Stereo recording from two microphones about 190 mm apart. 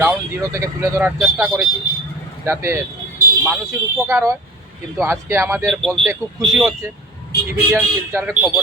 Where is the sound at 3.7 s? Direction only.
15° right (ahead or behind).